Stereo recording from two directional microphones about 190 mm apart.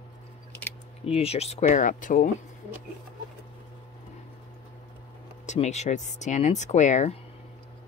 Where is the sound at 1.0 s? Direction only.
35° left (ahead or behind).